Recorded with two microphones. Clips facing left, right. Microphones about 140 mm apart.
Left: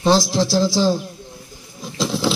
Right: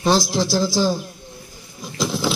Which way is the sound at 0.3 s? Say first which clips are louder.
Left 2 dB; 5° right (ahead or behind).